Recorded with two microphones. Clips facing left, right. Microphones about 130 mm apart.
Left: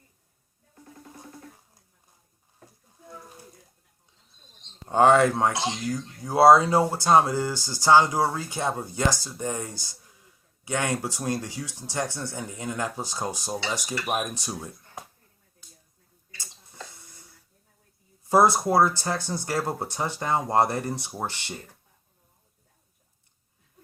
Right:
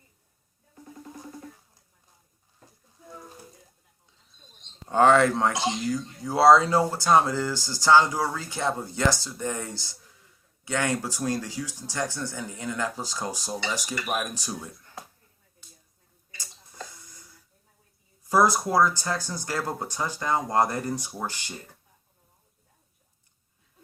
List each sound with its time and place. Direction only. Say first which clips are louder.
0.7 s music: right 4 dB; 5° right (ahead or behind)
4.9 s speech: left 1 dB; 15° left (ahead or behind)
10.7 s speech: even; 20° left (ahead or behind)
16.9 s a sound: even; 25° left (ahead or behind)
18.3 s speech: left 2 dB; 30° left (ahead or behind)